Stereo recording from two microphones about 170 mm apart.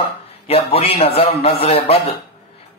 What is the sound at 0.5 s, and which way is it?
Speech, 35° left (ahead or behind).